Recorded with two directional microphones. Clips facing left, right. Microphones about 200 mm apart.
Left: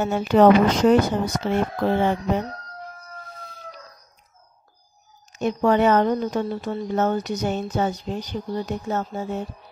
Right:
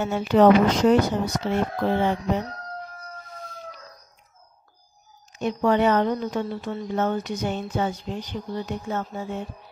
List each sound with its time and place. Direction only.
0.0 s speech: 45° left (ahead or behind)
5.3 s a woman's voice: 45° left (ahead or behind)